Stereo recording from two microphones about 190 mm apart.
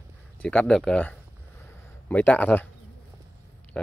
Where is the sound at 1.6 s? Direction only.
10° left (ahead or behind).